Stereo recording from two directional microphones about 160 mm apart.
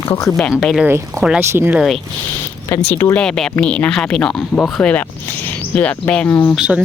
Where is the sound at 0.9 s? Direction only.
15° right (ahead or behind).